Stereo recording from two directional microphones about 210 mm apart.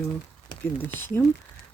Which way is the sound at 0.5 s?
20° left (ahead or behind).